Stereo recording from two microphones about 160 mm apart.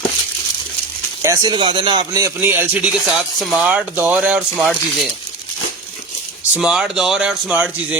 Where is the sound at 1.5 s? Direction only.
30° right (ahead or behind).